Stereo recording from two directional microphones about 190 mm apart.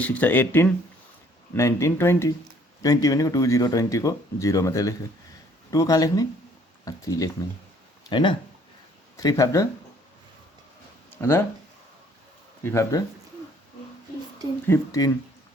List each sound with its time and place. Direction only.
0.0 s speech: 10° left (ahead or behind)
11.1 s speech: 15° left (ahead or behind)
12.6 s speech: 15° left (ahead or behind)
14.7 s speech: 20° left (ahead or behind)